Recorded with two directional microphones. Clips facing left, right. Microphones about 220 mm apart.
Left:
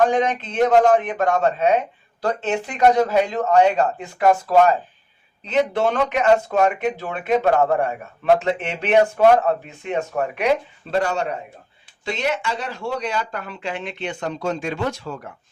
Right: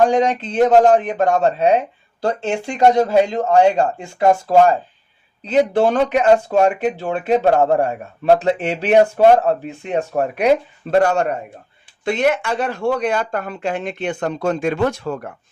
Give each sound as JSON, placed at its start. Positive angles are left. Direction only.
{"t": 0.0, "sound": "a man's voice", "side_deg": -30}
{"t": 10.9, "sound": "speech", "side_deg": -50}